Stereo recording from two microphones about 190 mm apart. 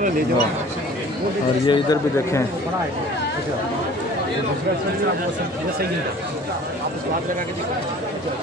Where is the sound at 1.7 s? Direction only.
15° left (ahead or behind).